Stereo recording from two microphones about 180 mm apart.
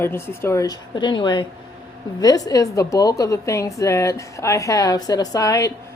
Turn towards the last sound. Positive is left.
turn(degrees=20)  # may be behind; listen again after turning